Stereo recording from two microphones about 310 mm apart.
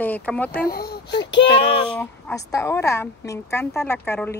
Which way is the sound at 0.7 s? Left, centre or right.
Left.